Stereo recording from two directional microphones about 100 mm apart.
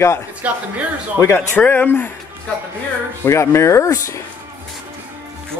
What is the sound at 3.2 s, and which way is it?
Speech, 25° left (ahead or behind).